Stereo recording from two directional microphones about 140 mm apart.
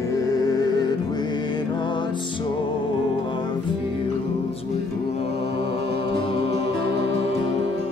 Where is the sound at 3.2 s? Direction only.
35° left (ahead or behind).